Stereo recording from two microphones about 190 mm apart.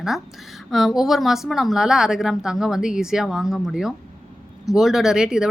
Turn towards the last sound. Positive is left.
turn(degrees=-5)  # may be behind; listen again after turning